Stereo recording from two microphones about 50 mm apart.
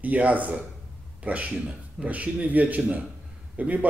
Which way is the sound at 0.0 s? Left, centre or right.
Right.